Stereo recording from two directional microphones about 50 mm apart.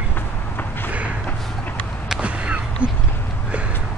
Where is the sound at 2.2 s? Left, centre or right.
Right.